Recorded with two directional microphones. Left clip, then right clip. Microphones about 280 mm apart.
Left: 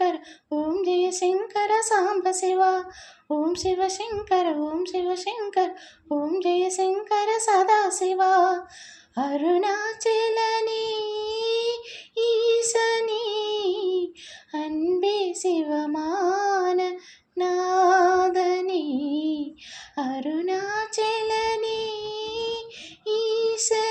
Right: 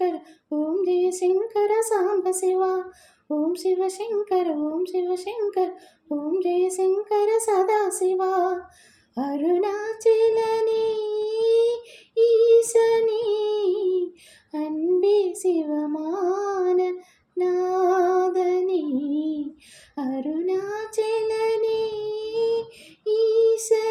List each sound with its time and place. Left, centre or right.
0.7 s speech: left
9.3 s child singing: left
14.5 s speech: left
20.7 s child singing: left